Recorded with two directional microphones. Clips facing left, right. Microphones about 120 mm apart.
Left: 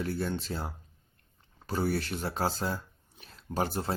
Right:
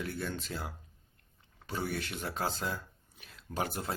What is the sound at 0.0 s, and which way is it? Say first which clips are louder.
Speech: left 5 dB; 35° left (ahead or behind).